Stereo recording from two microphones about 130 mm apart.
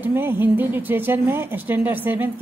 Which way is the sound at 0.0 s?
15° right (ahead or behind).